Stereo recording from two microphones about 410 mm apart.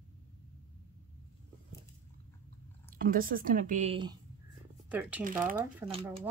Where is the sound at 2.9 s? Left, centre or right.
Centre.